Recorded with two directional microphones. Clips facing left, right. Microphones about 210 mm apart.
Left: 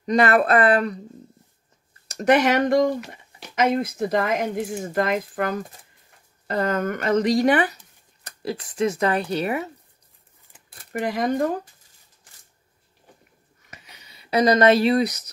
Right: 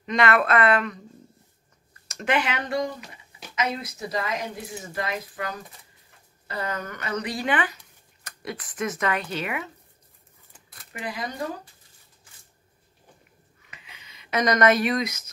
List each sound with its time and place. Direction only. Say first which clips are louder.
0.0 s speech: left 4 dB; 35° left (ahead or behind)
2.1 s speech: left 8 dB; 40° left (ahead or behind)
8.4 s speech: left 7 dB; 30° left (ahead or behind)
10.9 s speech: left 10 dB; 45° left (ahead or behind)
13.7 s a sound: left 3 dB; 40° left (ahead or behind)